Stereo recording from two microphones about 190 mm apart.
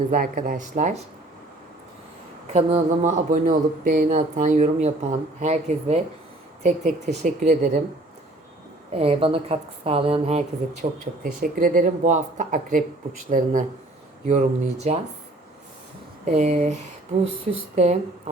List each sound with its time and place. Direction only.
0.1 s a woman's voice: 45° right (ahead or behind)
2.5 s a woman's voice: 35° right (ahead or behind)
8.9 s a woman's voice: 30° right (ahead or behind)
16.2 s a woman's voice: 35° right (ahead or behind)